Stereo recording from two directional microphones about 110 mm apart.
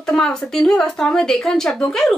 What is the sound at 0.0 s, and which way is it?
Speech, 5° left (ahead or behind).